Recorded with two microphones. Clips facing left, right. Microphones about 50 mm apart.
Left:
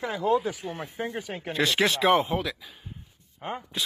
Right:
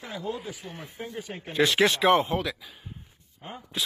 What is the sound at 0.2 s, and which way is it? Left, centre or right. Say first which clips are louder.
Speech: left 11 dB; left.